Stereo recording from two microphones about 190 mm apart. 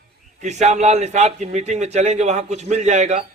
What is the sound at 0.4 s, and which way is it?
A man's voice, 35° right (ahead or behind).